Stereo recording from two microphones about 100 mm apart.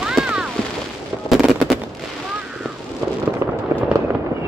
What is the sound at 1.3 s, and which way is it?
Fireworks, centre (ahead or behind).